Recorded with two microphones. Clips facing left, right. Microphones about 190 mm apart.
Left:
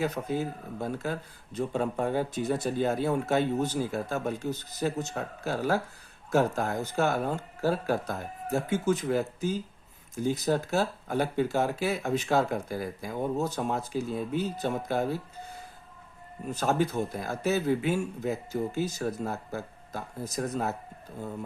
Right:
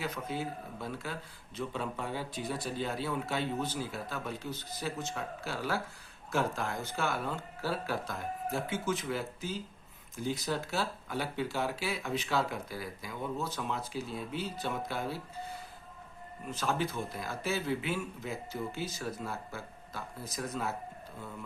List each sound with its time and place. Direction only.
0.0 s speech: 45° left (ahead or behind)
16.6 s speech: 40° left (ahead or behind)